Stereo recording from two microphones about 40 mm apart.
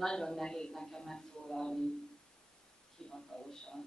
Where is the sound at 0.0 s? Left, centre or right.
Centre.